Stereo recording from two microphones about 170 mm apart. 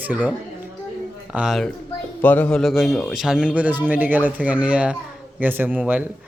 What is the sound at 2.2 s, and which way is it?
Speech, 10° left (ahead or behind).